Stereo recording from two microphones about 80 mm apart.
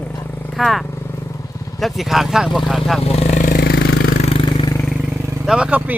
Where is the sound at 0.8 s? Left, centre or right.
Left.